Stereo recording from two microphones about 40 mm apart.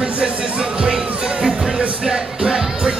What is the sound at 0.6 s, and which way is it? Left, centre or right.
Speech, right.